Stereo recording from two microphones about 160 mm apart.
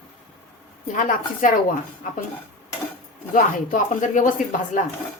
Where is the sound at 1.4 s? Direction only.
55° left (ahead or behind).